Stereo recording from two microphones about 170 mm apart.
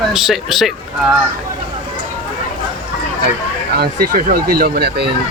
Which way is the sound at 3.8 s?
55° right (ahead or behind).